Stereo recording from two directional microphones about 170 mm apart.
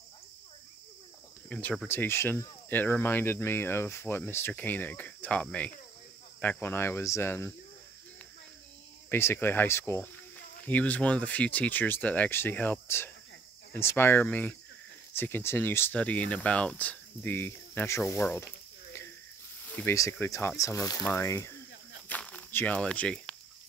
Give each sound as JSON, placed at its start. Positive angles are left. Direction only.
{"t": 1.5, "sound": "speech", "side_deg": 10}
{"t": 9.1, "sound": "speech", "side_deg": 10}
{"t": 19.6, "sound": "speech", "side_deg": 10}
{"t": 22.1, "sound": "walk", "side_deg": 10}